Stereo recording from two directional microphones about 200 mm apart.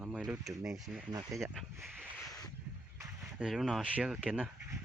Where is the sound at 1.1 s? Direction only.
15° right (ahead or behind).